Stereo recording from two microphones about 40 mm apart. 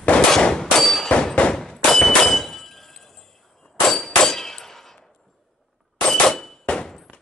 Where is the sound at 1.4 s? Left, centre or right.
Left.